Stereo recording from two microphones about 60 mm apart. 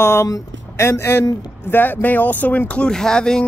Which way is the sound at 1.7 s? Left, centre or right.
Left.